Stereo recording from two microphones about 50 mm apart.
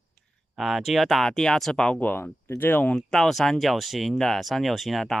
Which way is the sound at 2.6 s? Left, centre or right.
Left.